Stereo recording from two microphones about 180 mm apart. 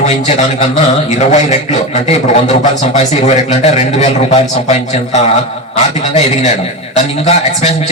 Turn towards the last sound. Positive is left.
turn(degrees=40)  # may be behind; listen again after turning